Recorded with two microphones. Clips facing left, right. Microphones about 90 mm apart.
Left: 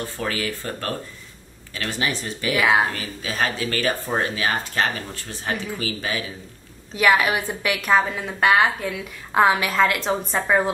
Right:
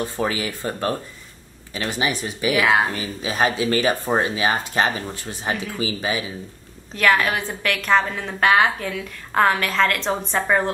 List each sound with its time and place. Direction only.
0.0 s speech: 20° right (ahead or behind)
2.5 s speech: centre (ahead or behind)
2.8 s speech: 15° right (ahead or behind)
7.0 s a woman's voice: 10° left (ahead or behind)